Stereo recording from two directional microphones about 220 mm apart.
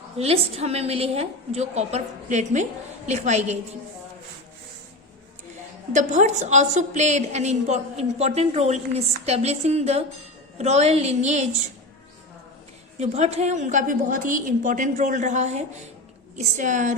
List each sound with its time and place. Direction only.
0.2 s a woman's voice: 30° right (ahead or behind)
5.9 s a woman's voice: 35° right (ahead or behind)
13.0 s a woman's voice: 30° right (ahead or behind)